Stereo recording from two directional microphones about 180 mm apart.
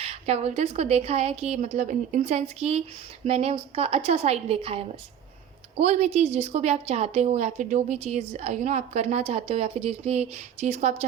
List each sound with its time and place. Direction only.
0.0 s a woman's voice: 35° right (ahead or behind)